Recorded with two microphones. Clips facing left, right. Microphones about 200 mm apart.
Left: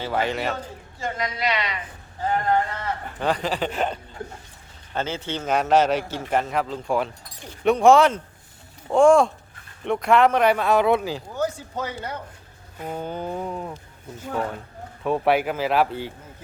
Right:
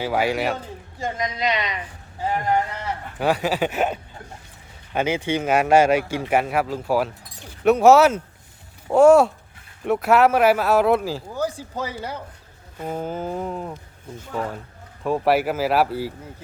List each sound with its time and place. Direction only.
0.0 s a man's voice: 10° right (ahead or behind)
15.0 s speech: centre (ahead or behind)